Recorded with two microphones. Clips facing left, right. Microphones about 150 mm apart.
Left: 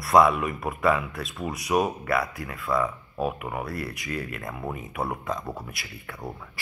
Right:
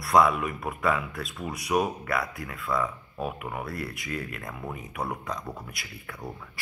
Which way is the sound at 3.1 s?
25° left (ahead or behind).